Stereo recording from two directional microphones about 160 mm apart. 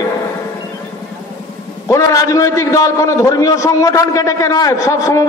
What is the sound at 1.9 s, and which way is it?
A man's voice, 20° left (ahead or behind).